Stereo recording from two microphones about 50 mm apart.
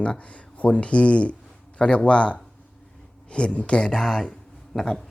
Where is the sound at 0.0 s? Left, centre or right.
Left.